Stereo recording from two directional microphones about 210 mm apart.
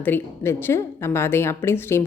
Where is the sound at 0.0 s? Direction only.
10° left (ahead or behind).